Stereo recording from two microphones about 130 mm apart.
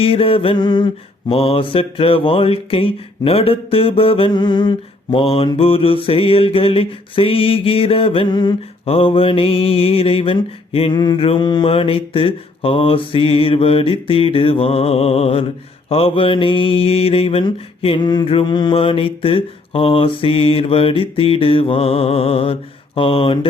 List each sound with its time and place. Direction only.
0.0 s mantra: 45° left (ahead or behind)
1.3 s mantra: 45° left (ahead or behind)
8.9 s mantra: 45° left (ahead or behind)
10.9 s mantra: 35° left (ahead or behind)